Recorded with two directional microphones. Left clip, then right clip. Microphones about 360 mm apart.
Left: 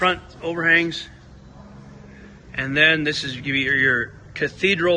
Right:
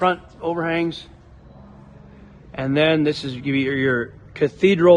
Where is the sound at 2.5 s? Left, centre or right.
Centre.